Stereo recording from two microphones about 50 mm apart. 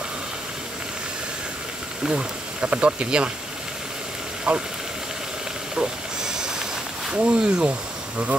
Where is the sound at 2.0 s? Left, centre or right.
Centre.